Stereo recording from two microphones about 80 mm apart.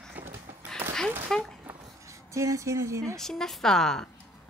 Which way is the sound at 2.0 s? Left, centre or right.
Right.